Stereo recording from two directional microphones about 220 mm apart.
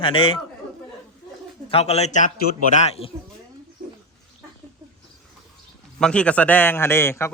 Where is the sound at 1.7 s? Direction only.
30° left (ahead or behind).